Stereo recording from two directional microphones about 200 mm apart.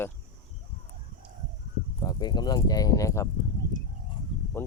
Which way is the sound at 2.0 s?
20° left (ahead or behind).